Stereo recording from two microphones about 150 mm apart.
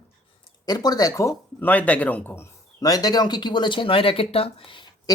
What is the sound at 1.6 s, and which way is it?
A man's voice, 10° left (ahead or behind).